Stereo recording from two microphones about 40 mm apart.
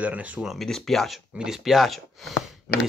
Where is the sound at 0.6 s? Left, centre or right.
Centre.